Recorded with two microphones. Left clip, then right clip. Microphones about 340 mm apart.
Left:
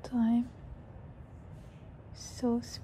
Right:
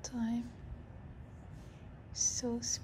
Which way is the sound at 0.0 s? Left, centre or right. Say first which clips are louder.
Left 8 dB; centre.